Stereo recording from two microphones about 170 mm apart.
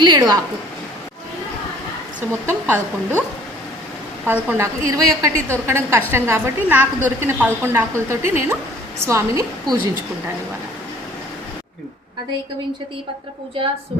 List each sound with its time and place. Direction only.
0.0 s a woman's voice: 25° right (ahead or behind)
2.5 s a woman's voice: 15° right (ahead or behind)
4.3 s a woman's voice: 15° right (ahead or behind)